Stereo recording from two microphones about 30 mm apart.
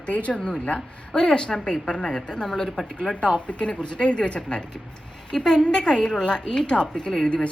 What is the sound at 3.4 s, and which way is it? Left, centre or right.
A woman's voice, left.